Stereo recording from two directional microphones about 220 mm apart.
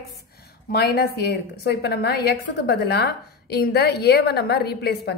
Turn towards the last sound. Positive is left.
turn(degrees=45)  # may be behind; listen again after turning